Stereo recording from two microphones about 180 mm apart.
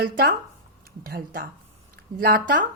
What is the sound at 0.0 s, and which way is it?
A woman's voice, 55° right (ahead or behind).